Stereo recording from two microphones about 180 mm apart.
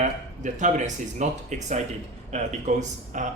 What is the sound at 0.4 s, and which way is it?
Speech, 40° right (ahead or behind).